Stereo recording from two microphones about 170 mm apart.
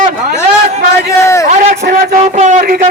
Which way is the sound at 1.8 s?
60° right (ahead or behind).